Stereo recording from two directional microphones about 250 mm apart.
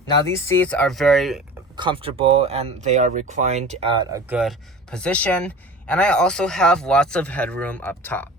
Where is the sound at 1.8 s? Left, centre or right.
Centre.